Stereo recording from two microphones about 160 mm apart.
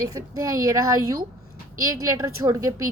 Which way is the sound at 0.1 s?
20° right (ahead or behind).